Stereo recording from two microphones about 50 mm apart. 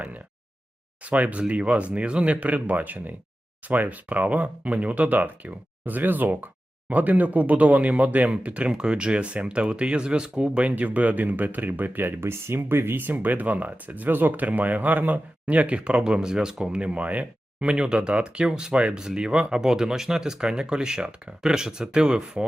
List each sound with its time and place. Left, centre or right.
1.0 s speech: right
10.7 s speech: right